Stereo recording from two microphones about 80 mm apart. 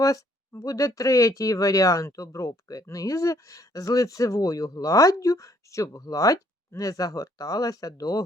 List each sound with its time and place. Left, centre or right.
0.6 s speech: left